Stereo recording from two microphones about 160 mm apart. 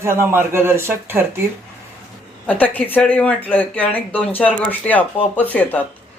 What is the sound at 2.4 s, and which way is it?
Speech, 10° left (ahead or behind).